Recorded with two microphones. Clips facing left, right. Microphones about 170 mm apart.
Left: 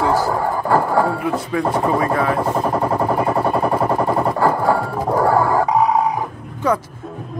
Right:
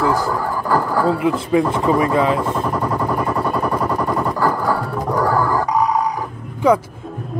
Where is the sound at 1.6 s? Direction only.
20° right (ahead or behind).